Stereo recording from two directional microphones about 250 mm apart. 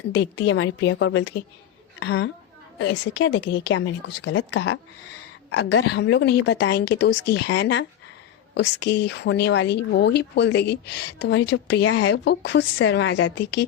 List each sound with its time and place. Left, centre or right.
0.1 s speech: left
3.7 s speech: left